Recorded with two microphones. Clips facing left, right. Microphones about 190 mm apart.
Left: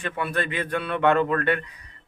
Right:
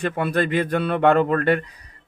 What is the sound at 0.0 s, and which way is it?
Speech, 40° right (ahead or behind).